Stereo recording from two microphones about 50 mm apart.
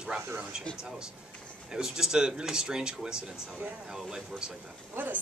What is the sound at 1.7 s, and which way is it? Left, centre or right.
Speech, centre.